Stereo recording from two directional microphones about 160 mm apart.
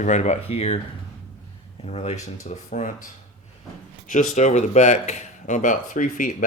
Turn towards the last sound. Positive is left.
turn(degrees=55)  # may be behind; listen again after turning